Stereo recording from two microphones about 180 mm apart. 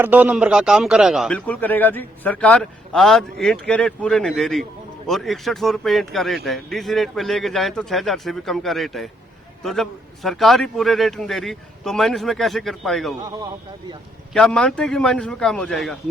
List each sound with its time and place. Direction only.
0.0 s a man's voice: 10° right (ahead or behind)
13.2 s a man's voice: 20° right (ahead or behind)
14.3 s a man's voice: 5° left (ahead or behind)